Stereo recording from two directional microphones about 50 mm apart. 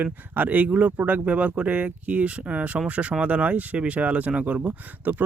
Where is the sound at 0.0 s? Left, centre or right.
Right.